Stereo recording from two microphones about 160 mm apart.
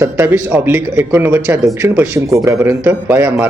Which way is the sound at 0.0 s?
15° right (ahead or behind).